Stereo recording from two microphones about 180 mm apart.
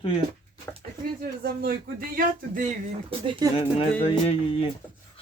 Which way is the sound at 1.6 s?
55° right (ahead or behind).